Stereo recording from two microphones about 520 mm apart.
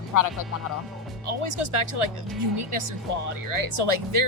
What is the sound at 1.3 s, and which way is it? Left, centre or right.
Speech, right.